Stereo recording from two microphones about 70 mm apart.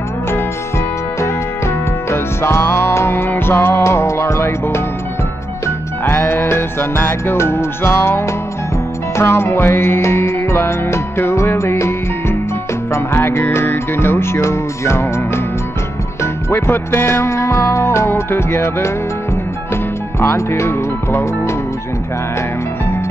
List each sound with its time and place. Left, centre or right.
2.0 s music: left
6.0 s music: left